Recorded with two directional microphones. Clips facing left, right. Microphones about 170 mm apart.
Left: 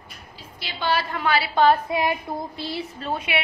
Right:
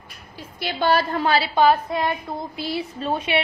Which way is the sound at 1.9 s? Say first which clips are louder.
Even; 10° left (ahead or behind).